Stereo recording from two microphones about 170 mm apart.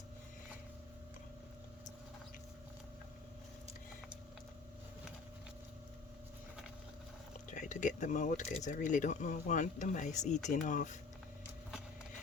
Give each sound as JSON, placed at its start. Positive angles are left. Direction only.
{"t": 7.5, "sound": "speech", "side_deg": 45}